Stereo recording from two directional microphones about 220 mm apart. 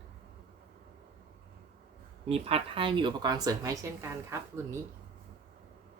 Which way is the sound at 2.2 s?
25° right (ahead or behind).